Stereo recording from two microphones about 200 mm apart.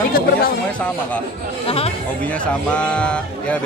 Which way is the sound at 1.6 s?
30° left (ahead or behind).